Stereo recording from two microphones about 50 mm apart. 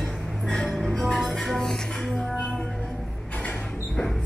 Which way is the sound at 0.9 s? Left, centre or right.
Centre.